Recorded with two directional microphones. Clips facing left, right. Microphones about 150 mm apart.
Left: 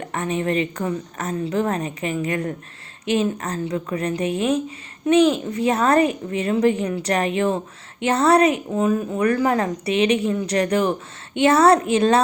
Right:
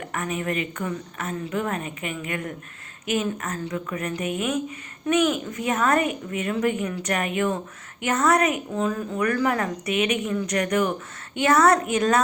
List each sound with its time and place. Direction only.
0.0 s a woman's voice: 30° left (ahead or behind)